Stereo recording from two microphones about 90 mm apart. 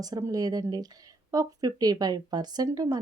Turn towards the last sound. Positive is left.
turn(degrees=-45)  # may be behind; listen again after turning